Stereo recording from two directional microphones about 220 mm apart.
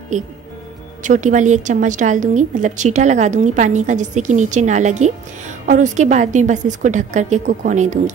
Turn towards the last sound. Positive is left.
turn(degrees=-35)  # may be behind; listen again after turning